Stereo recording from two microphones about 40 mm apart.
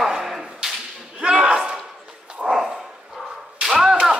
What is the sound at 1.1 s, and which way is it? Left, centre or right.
Slam, centre.